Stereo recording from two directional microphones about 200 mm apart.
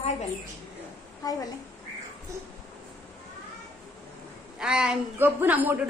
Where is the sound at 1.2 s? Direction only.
20° left (ahead or behind).